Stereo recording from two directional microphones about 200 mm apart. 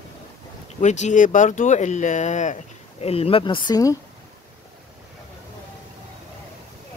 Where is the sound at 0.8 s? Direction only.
35° left (ahead or behind); by 4.0 s 20° left (ahead or behind).